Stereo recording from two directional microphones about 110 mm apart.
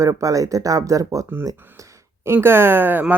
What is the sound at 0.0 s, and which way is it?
Speech, 30° right (ahead or behind).